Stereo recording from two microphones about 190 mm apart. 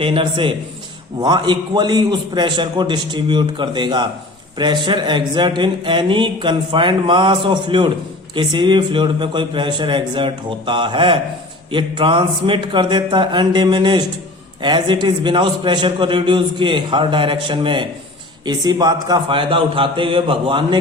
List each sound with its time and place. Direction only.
0.0 s speech: 25° right (ahead or behind)